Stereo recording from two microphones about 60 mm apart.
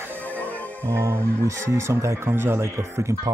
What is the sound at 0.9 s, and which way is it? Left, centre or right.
Speech, right.